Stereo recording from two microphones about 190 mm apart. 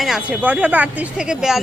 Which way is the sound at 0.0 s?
5° right (ahead or behind).